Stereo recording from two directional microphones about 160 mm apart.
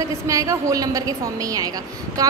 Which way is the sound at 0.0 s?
20° right (ahead or behind).